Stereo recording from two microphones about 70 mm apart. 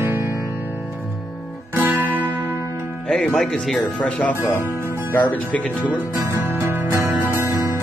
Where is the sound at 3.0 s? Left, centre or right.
Centre.